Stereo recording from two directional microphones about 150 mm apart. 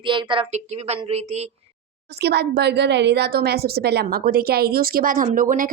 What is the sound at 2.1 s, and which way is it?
A woman's voice, 90° right.